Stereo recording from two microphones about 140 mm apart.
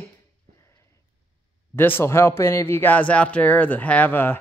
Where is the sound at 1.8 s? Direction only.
15° left (ahead or behind).